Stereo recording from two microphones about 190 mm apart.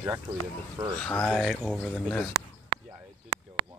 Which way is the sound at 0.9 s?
5° left (ahead or behind).